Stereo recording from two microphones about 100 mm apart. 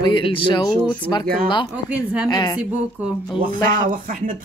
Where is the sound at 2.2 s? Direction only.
40° left (ahead or behind).